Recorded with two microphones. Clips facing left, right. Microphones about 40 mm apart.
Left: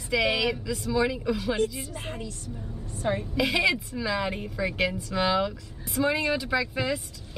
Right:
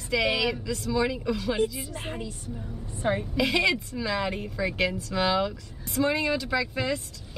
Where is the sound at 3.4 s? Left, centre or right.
Centre.